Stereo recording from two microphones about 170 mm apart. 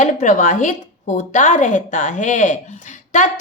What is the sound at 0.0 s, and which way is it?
A woman's voice, 45° left (ahead or behind).